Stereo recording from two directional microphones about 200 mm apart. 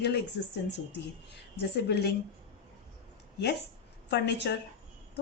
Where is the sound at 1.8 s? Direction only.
55° left (ahead or behind).